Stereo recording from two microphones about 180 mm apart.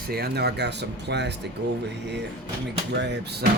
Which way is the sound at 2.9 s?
70° right (ahead or behind).